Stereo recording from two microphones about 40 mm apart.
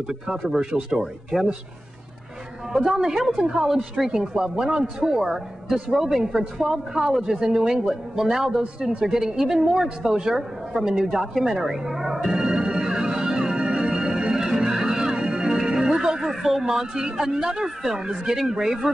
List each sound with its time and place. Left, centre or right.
0.6 s speech: centre
2.9 s speech: centre
10.7 s music: centre
16.4 s speech: centre